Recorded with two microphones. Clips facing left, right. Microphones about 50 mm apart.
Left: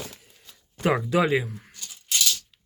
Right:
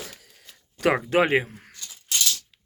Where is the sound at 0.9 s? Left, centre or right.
Right.